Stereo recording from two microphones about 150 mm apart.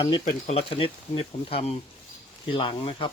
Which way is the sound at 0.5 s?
40° left (ahead or behind).